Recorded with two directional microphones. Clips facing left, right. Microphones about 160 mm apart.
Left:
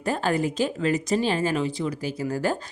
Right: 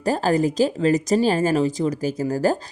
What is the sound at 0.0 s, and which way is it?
A woman's voice, 35° right (ahead or behind).